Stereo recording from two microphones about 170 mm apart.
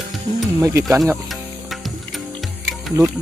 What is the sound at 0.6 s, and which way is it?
Speech, 15° right (ahead or behind).